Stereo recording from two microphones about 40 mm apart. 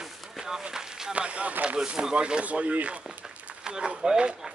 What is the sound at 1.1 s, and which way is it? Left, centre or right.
Speech, right.